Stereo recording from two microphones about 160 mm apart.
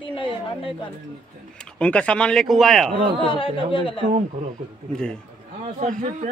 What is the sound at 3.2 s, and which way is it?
Speech, 30° left (ahead or behind).